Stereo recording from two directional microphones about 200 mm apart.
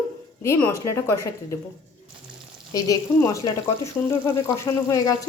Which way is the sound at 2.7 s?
20° left (ahead or behind).